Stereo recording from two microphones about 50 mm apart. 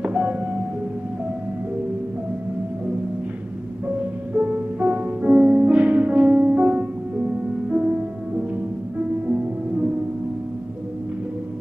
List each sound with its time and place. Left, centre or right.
0.0 s music: right
4.3 s music: right